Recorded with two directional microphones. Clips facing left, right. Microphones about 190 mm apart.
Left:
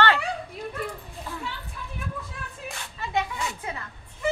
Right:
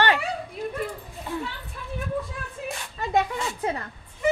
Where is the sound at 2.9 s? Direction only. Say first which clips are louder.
Right 4 dB; 40° right (ahead or behind).